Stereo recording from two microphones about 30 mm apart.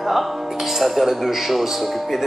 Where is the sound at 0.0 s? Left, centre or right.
Centre.